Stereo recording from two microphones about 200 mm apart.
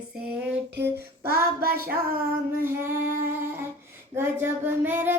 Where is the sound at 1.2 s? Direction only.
50° right (ahead or behind).